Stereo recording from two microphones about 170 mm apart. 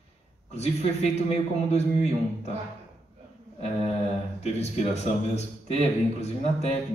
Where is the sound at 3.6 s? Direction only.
40° left (ahead or behind).